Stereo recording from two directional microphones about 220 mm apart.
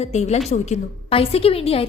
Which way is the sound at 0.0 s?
30° left (ahead or behind).